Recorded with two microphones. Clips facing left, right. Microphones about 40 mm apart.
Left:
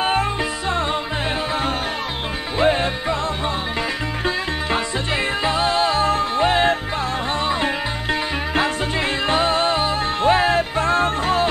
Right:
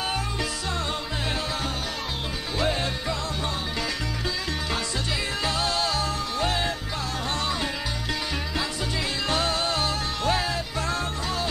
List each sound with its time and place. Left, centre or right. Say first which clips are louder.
0.0 s music: left 9 dB; left
2.6 s music: left 9 dB; left
5.4 s music: left 7 dB; left